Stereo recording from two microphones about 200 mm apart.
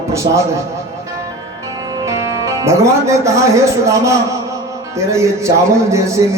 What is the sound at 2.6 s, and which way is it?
Speech, 15° right (ahead or behind).